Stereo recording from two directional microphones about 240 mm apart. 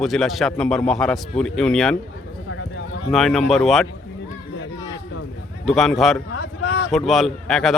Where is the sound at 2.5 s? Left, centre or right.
Left.